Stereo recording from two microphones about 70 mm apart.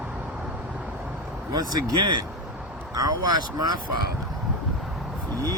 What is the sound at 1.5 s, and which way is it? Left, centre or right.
Speech, right.